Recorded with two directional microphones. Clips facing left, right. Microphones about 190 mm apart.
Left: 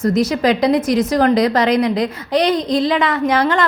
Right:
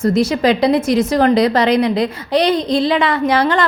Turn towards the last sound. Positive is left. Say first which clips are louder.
# right 1 dB
turn(degrees=-30)  # may be behind; listen again after turning